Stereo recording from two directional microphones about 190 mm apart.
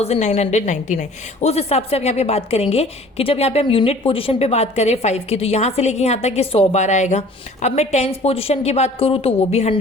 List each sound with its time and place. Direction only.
0.0 s a woman's voice: 35° left (ahead or behind)